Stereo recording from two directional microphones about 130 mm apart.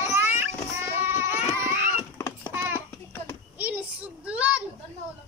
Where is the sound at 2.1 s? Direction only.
20° left (ahead or behind).